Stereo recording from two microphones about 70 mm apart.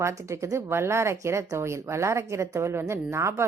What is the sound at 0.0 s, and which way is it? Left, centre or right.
Speech, right.